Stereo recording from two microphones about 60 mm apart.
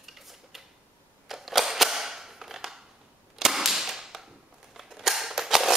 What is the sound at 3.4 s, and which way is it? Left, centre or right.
Mechanisms, centre.